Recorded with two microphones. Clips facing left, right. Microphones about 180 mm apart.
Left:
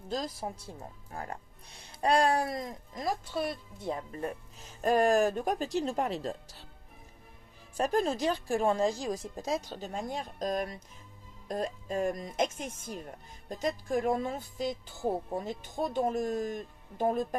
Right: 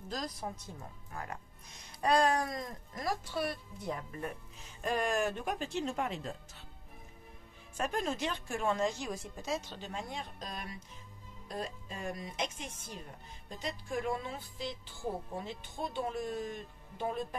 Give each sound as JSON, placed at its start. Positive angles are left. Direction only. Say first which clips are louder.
{"t": 0.1, "sound": "speech", "louder": "left 5 dB", "side_deg": 30}
{"t": 4.8, "sound": "speech", "louder": "left 7 dB", "side_deg": 40}
{"t": 7.7, "sound": "speech", "louder": "left 6 dB", "side_deg": 35}